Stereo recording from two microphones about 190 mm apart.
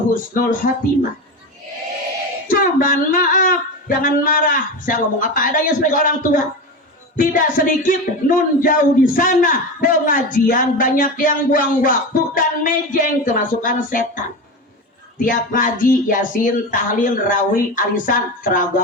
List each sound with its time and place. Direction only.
0.1 s speech: 45° left (ahead or behind)
2.5 s speech: 45° left (ahead or behind)
7.2 s speech: 45° left (ahead or behind)
15.2 s speech: 45° left (ahead or behind)